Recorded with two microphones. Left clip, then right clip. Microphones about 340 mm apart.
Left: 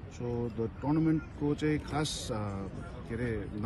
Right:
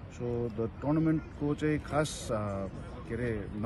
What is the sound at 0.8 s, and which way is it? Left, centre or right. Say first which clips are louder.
Speech: even; centre.